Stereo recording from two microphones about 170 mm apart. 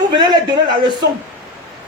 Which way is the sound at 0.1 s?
25° right (ahead or behind).